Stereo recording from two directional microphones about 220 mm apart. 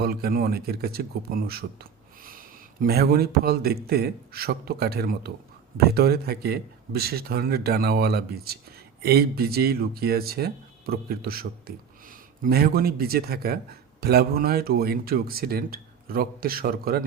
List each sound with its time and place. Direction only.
0.0 s speech: 45° right (ahead or behind)